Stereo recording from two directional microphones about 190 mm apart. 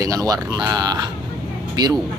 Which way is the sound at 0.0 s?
20° right (ahead or behind).